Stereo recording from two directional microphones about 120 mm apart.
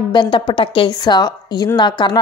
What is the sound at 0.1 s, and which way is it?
A woman's voice, 45° left (ahead or behind).